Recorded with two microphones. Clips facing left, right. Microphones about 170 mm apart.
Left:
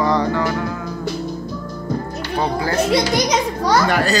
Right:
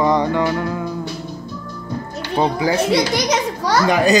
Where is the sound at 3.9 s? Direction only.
15° right (ahead or behind).